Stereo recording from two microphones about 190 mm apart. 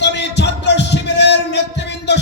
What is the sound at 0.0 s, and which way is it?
Music, 65° left (ahead or behind).